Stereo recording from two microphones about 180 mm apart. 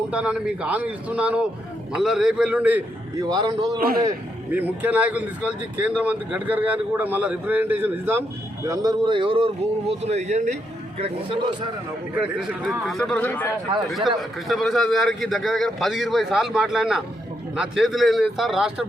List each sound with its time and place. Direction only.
0.1 s speech: 5° right (ahead or behind)
3.2 s a man's voice: 20° right (ahead or behind)
3.8 s a man's voice: 55° right (ahead or behind)
4.5 s a man's voice: 10° right (ahead or behind); by 9.5 s 30° right (ahead or behind)
10.0 s a man's voice: 40° right (ahead or behind)
12.1 s speech: 5° right (ahead or behind)